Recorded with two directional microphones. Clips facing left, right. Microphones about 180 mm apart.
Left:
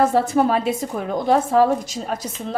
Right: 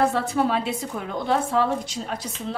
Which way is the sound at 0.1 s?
45° left (ahead or behind).